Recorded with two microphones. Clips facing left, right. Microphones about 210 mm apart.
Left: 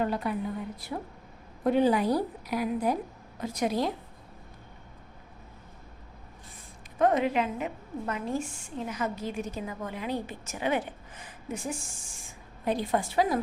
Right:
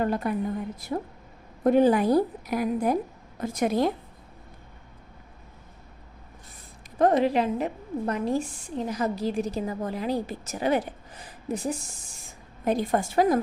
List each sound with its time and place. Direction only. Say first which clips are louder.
0.0 s a woman's voice: right 3 dB; 45° right (ahead or behind)
1.6 s a woman's voice: right 4 dB; 50° right (ahead or behind)
7.0 s a woman's voice: right 3 dB; 35° right (ahead or behind)